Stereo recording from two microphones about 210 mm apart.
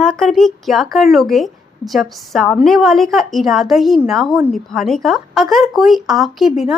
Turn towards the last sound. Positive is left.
turn(degrees=0)  # may be behind; listen again after turning